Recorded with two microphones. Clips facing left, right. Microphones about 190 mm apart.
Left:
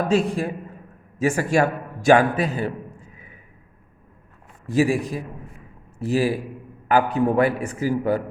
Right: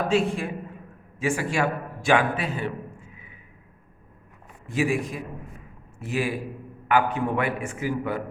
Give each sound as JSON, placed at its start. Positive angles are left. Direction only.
{"t": 0.1, "sound": "a man's voice", "side_deg": 40}
{"t": 4.7, "sound": "a man's voice", "side_deg": 35}